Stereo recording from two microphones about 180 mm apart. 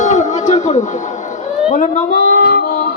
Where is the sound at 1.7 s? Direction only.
45° left (ahead or behind).